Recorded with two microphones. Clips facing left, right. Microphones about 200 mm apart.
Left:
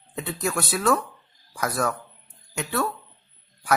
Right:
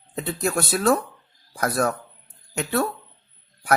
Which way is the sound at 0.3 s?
50° right (ahead or behind).